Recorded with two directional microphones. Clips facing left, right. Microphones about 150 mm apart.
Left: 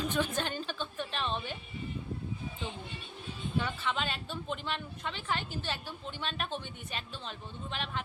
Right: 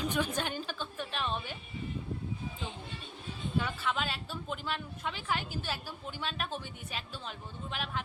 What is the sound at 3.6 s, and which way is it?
Speech, 5° right (ahead or behind).